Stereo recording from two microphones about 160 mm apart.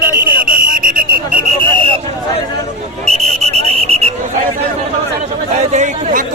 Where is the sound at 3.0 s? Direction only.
40° right (ahead or behind).